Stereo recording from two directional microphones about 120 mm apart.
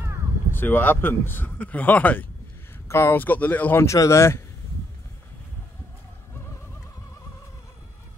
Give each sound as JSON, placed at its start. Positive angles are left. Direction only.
{"t": 0.5, "sound": "speech", "side_deg": 15}
{"t": 3.8, "sound": "speech", "side_deg": 25}